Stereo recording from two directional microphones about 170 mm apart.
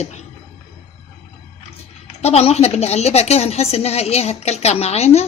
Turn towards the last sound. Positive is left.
turn(degrees=40)  # may be behind; listen again after turning